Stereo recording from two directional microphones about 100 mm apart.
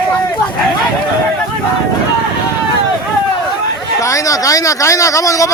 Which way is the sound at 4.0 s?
30° left (ahead or behind).